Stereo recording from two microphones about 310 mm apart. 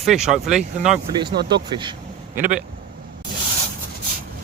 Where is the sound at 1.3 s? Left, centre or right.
Right.